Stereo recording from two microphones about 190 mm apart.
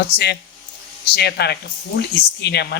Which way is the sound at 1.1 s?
60° left (ahead or behind).